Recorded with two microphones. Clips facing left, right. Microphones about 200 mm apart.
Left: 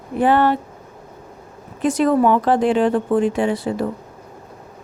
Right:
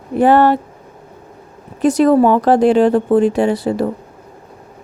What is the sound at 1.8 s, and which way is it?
A woman's voice, 40° right (ahead or behind).